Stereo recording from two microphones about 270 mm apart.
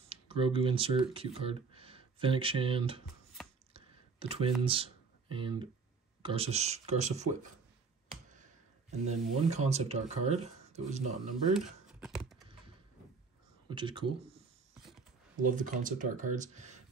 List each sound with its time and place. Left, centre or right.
0.1 s speech: centre
3.7 s a sound: right
4.6 s speech: centre
9.0 s speech: right
11.5 s computer keyboard: centre
13.7 s speech: centre
14.8 s a sound: centre
15.3 s speech: right